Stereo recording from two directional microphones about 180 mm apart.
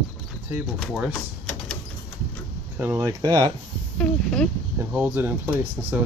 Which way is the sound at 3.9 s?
5° left (ahead or behind).